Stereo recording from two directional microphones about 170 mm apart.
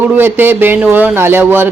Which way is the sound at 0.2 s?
10° right (ahead or behind).